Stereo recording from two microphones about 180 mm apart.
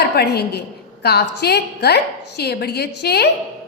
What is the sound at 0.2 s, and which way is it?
A woman's voice, 65° left (ahead or behind).